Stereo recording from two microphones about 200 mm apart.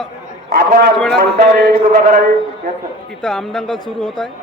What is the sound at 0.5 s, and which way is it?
Speech, 50° right (ahead or behind).